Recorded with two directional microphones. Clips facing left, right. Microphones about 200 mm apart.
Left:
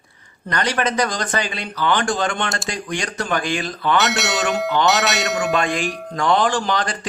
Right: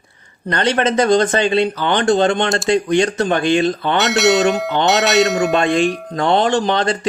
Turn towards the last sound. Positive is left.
turn(degrees=-25)  # may be behind; listen again after turning